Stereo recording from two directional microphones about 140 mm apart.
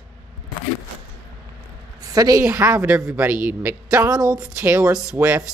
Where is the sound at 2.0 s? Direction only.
25° right (ahead or behind).